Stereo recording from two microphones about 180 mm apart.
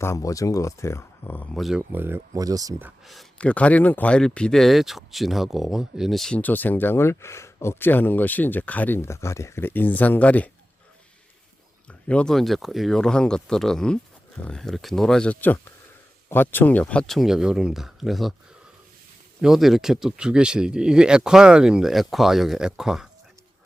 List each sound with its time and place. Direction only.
0.0 s speech: 15° left (ahead or behind)
1.5 s speech: centre (ahead or behind)
3.0 s speech: centre (ahead or behind)
11.9 s speech: 5° left (ahead or behind)
19.4 s speech: centre (ahead or behind)